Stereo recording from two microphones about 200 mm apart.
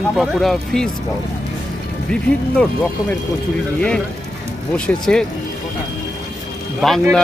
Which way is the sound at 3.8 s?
5° left (ahead or behind).